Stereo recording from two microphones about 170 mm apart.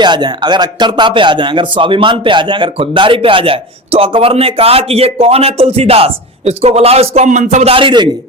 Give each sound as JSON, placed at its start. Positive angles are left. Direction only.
{"t": 0.0, "sound": "speech", "side_deg": -25}